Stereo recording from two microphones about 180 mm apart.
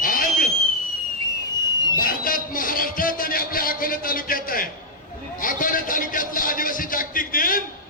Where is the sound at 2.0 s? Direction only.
50° left (ahead or behind).